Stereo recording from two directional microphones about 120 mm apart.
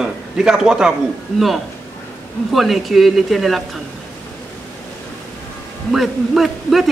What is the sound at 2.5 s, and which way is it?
A man's voice, centre (ahead or behind).